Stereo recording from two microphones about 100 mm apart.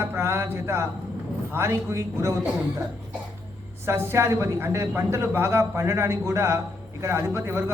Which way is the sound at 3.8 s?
25° right (ahead or behind).